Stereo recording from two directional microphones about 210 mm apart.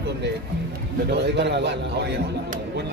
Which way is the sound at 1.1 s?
55° right (ahead or behind).